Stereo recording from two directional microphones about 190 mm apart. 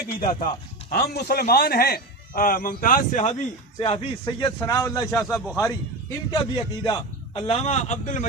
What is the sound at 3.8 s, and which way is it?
A man's voice, 25° left (ahead or behind).